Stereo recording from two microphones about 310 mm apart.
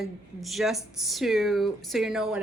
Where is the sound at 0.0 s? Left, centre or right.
Centre.